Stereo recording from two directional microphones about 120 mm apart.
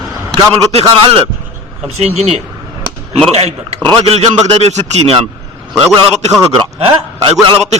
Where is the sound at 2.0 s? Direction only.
65° right (ahead or behind).